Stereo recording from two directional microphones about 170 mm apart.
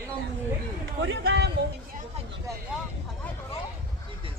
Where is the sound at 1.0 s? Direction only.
85° right.